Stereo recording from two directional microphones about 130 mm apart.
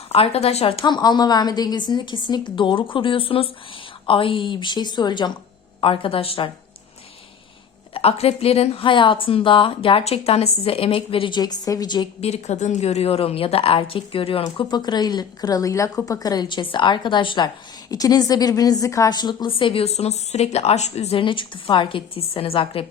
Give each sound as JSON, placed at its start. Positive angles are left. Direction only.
{"t": 0.1, "sound": "a woman's voice", "side_deg": 50}
{"t": 0.9, "sound": "a woman's voice", "side_deg": 35}
{"t": 7.9, "sound": "a woman's voice", "side_deg": 50}
{"t": 12.2, "sound": "a woman's voice", "side_deg": 60}
{"t": 14.6, "sound": "a woman's voice", "side_deg": 35}